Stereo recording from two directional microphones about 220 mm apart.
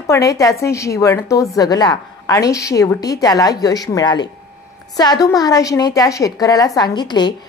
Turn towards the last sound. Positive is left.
turn(degrees=20)  # may be behind; listen again after turning